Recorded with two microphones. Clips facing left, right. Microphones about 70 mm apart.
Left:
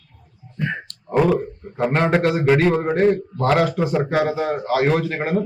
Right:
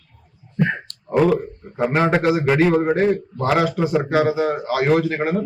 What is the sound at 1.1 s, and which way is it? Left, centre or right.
Speech, centre.